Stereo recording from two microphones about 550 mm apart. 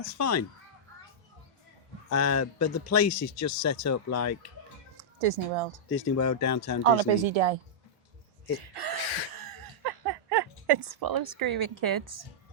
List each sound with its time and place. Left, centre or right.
0.2 s speech: left
2.0 s speech: left
5.2 s speech: right
5.9 s speech: left
6.8 s speech: right
8.7 s speech: right
9.8 s a sound: right
11.7 s a woman's voice: right